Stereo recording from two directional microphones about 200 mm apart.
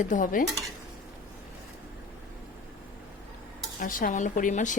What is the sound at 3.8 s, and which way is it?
Speech, 45° left (ahead or behind).